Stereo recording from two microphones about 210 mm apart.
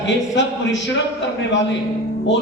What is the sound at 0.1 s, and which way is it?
Speech, 60° left (ahead or behind).